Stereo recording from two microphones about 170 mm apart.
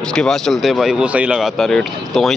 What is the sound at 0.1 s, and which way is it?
Speech, 5° left (ahead or behind).